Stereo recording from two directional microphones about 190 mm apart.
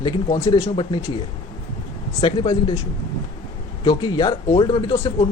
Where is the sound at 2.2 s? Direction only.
25° left (ahead or behind).